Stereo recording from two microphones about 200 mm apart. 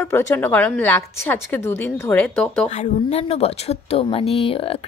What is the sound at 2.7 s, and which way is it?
Speech, 35° left (ahead or behind).